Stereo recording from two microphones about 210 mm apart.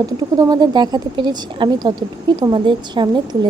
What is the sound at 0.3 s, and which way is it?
A woman's voice, 20° right (ahead or behind).